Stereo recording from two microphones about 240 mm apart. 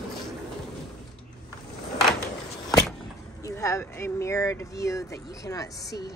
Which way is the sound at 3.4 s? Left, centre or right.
Centre.